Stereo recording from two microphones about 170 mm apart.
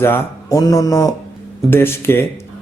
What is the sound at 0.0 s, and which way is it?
A man's voice, 15° left (ahead or behind).